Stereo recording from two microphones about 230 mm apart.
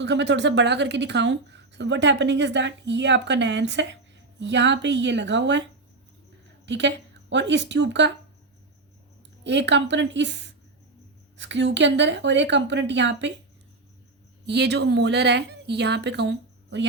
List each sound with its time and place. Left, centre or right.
0.0 s speech: right
6.7 s speech: right
9.4 s speech: right
14.4 s speech: right